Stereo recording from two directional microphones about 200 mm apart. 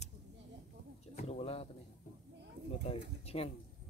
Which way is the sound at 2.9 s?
30° left (ahead or behind).